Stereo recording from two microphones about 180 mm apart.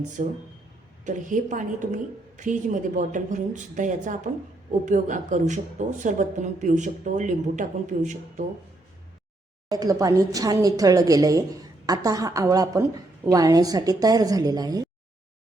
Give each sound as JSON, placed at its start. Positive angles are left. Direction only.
{"t": 0.2, "sound": "speech", "side_deg": -45}
{"t": 9.6, "sound": "a woman's voice", "side_deg": -20}